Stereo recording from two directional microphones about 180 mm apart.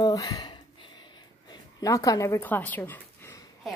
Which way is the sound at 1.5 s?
20° left (ahead or behind).